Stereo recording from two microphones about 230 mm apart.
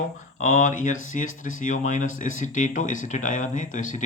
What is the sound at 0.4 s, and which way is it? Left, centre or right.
Speech, left.